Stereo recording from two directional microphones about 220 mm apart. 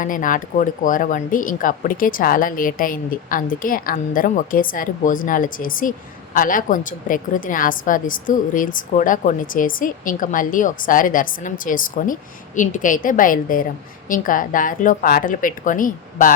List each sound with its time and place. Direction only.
0.0 s a woman's voice: 35° left (ahead or behind)